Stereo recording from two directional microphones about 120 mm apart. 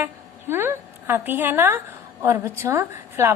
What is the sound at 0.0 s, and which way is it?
A woman's voice, 20° right (ahead or behind).